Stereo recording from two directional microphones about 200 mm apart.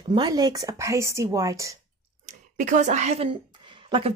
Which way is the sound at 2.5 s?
40° right (ahead or behind).